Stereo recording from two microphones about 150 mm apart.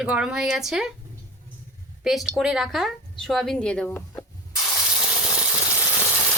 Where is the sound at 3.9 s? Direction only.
20° left (ahead or behind).